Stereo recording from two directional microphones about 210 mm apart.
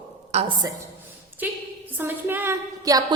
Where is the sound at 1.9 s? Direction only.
10° right (ahead or behind).